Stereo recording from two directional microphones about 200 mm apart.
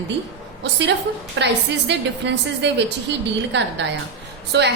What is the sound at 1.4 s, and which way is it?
A woman's voice, 65° right (ahead or behind).